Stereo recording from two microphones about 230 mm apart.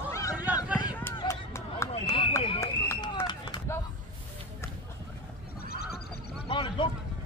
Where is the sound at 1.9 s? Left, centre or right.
Left.